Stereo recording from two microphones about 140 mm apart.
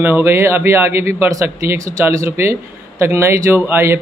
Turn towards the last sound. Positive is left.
turn(degrees=-15)  # may be behind; listen again after turning